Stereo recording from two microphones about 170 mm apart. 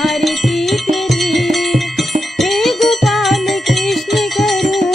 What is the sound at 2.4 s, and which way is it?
Music, centre (ahead or behind).